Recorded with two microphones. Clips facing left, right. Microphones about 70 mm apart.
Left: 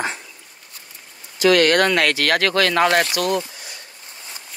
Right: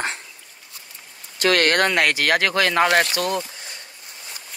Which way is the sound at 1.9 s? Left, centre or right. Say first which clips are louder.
Left 1 dB; right.